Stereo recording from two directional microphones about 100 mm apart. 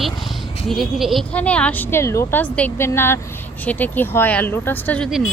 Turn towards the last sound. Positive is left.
turn(degrees=-5)  # may be behind; listen again after turning